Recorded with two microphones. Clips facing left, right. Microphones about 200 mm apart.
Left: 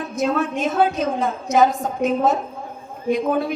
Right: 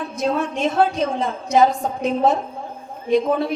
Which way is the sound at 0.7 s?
35° right (ahead or behind).